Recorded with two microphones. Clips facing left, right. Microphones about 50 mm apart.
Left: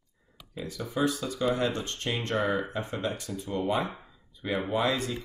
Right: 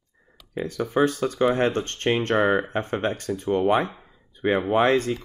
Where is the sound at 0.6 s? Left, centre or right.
Right.